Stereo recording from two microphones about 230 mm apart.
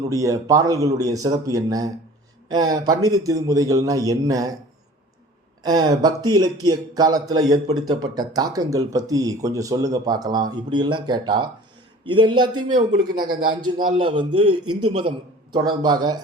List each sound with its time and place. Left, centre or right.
0.1 s speech: centre
5.6 s a man's voice: centre
13.1 s speech: right
13.4 s a man's voice: right
14.6 s a man's voice: right
15.5 s speech: centre